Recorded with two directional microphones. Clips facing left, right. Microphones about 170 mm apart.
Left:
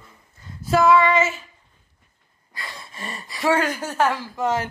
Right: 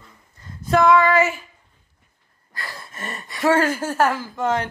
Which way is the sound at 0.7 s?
Centre (ahead or behind).